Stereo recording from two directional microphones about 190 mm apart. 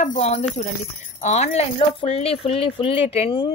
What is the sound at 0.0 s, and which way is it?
Speech, 40° left (ahead or behind).